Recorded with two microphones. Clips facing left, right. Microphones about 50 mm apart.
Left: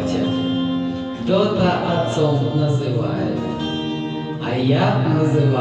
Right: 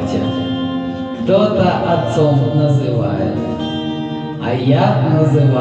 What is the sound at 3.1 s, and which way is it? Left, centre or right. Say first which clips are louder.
Music: right 4 dB; right.